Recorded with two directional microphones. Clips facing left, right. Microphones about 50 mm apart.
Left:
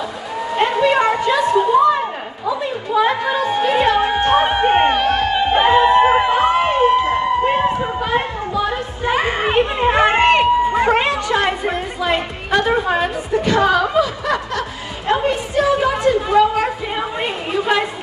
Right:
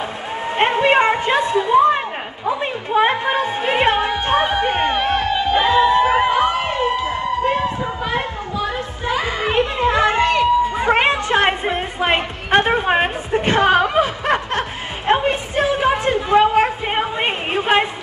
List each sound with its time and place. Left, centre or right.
0.4 s a sound: right
4.4 s a sound: left
4.9 s music: right
5.2 s music: left
9.0 s children playing: left
10.9 s music: right
15.0 s chatter: right